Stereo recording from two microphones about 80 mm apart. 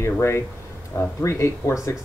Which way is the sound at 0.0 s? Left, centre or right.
Left.